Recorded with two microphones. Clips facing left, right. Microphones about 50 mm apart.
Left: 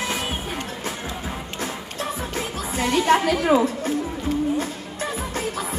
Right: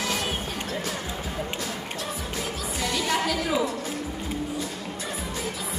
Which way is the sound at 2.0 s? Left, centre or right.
Left.